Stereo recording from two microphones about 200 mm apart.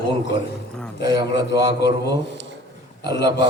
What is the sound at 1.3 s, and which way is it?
Speech, 60° left (ahead or behind).